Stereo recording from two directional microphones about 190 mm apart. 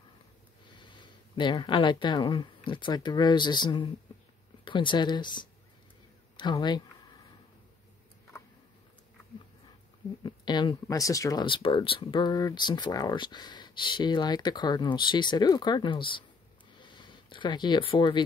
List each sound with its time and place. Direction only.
0.7 s speech: 25° left (ahead or behind)
6.3 s speech: 25° left (ahead or behind)
10.2 s speech: 25° left (ahead or behind)